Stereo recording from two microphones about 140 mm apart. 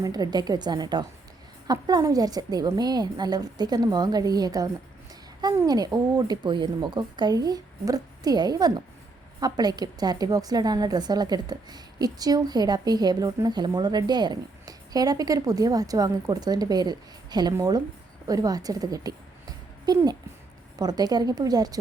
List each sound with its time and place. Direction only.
0.0 s a woman's voice: 30° right (ahead or behind)